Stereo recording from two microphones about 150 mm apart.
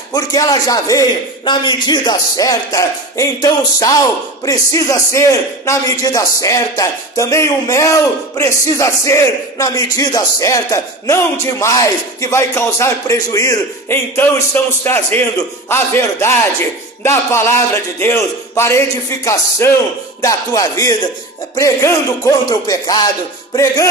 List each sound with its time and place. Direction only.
0.1 s a man's voice: 25° left (ahead or behind)